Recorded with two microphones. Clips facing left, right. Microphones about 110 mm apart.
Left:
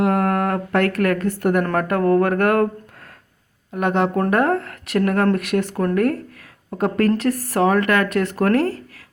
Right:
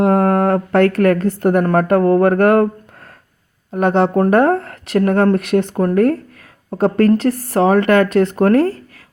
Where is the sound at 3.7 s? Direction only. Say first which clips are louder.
Right 5 dB; 35° right (ahead or behind).